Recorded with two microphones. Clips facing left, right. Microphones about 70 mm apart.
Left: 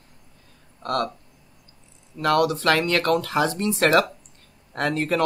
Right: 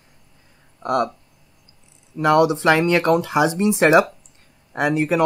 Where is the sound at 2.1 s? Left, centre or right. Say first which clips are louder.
Right 5 dB; centre.